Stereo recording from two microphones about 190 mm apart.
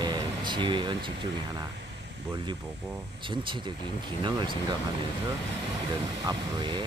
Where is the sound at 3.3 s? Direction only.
25° right (ahead or behind).